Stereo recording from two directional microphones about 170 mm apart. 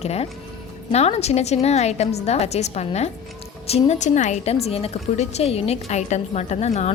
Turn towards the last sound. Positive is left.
turn(degrees=40)  # may be behind; listen again after turning